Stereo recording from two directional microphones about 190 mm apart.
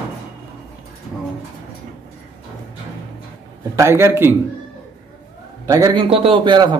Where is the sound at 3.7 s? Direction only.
15° right (ahead or behind).